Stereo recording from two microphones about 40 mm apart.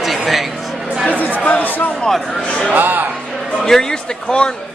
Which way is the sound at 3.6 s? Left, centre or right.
Centre.